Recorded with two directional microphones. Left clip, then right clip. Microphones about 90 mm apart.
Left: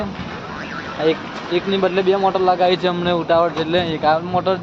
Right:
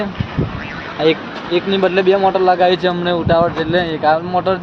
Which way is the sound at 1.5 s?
75° right (ahead or behind).